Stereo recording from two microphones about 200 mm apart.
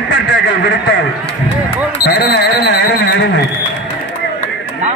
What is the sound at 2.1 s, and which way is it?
A man's voice, 55° left (ahead or behind).